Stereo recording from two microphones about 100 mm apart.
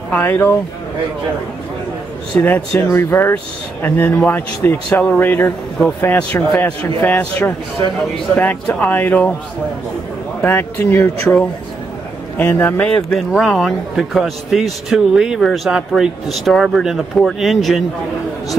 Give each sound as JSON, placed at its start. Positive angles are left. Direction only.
{"t": 0.1, "sound": "speech", "side_deg": 20}
{"t": 2.4, "sound": "a man's voice", "side_deg": 20}
{"t": 10.4, "sound": "speech", "side_deg": 20}
{"t": 12.4, "sound": "speech", "side_deg": 20}
{"t": 13.3, "sound": "a man's voice", "side_deg": 0}